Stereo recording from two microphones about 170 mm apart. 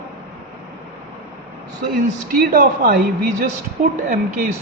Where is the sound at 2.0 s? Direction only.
55° right (ahead or behind).